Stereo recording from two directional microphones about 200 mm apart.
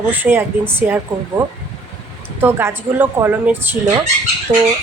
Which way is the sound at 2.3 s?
10° right (ahead or behind).